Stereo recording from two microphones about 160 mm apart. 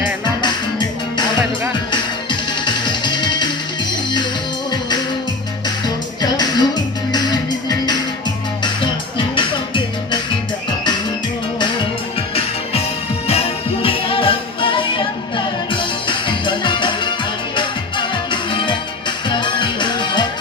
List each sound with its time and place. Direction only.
0.4 s music: 30° left (ahead or behind)
6.2 s music: 25° left (ahead or behind)
13.2 s music: 40° left (ahead or behind)